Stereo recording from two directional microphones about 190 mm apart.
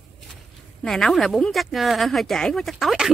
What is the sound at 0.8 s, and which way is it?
Speech, centre (ahead or behind).